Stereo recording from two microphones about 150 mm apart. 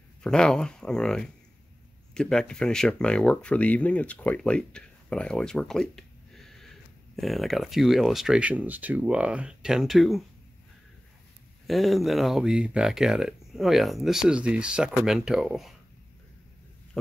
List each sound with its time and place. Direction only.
0.2 s speech: 5° left (ahead or behind)
11.6 s speech: centre (ahead or behind)
17.0 s a sound: 5° left (ahead or behind)